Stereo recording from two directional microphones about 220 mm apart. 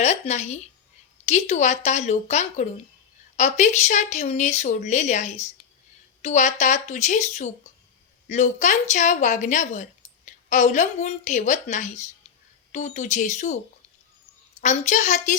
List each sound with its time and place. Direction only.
0.0 s speech: 30° left (ahead or behind)
14.6 s speech: 30° left (ahead or behind)